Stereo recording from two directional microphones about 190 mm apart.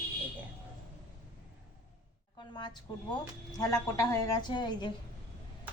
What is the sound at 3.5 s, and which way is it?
A woman's voice, 20° left (ahead or behind).